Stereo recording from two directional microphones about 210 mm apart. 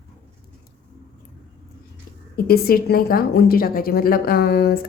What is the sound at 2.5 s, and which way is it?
A woman's voice, 45° left (ahead or behind).